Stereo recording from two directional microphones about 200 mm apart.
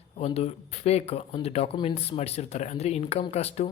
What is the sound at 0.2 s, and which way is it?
Speech, 30° left (ahead or behind).